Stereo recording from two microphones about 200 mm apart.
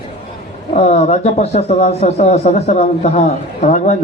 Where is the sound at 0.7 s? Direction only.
35° left (ahead or behind).